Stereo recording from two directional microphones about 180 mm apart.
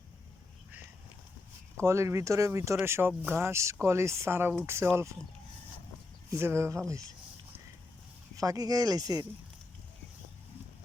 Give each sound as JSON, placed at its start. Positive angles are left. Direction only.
{"t": 1.8, "sound": "speech", "side_deg": -15}
{"t": 6.3, "sound": "speech", "side_deg": -15}
{"t": 8.4, "sound": "speech", "side_deg": -20}